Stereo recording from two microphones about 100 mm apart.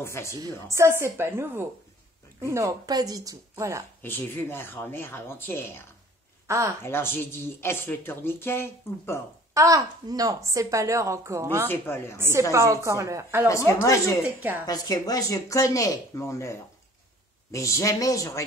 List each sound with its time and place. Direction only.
0.0 s speech: 25° left (ahead or behind)
0.3 s a woman's voice: 30° right (ahead or behind)
4.0 s speech: 20° left (ahead or behind)
6.4 s speech: 30° right (ahead or behind)
6.8 s speech: 25° left (ahead or behind)
9.5 s a woman's voice: 35° right (ahead or behind)
11.6 s speech: 20° left (ahead or behind)
12.2 s a woman's voice: 25° right (ahead or behind)
13.5 s speech: 30° left (ahead or behind)